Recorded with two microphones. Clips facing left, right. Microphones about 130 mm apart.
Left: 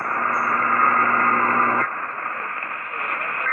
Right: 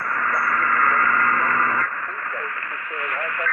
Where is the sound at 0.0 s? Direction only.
35° left (ahead or behind).